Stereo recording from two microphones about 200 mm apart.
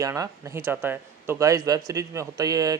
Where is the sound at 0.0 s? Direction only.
15° right (ahead or behind).